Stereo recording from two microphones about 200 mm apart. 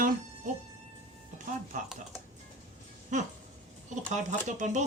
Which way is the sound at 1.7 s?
40° right (ahead or behind).